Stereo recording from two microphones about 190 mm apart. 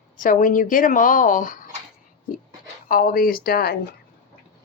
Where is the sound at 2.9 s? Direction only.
45° left (ahead or behind).